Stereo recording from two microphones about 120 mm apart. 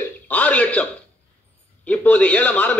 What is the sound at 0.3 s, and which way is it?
Speech, 10° left (ahead or behind).